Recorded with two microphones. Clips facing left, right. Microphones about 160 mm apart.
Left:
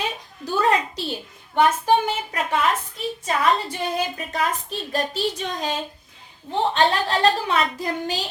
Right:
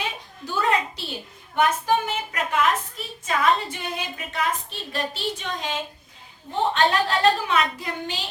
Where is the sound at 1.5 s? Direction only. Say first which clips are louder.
Left 3 dB; 35° left (ahead or behind).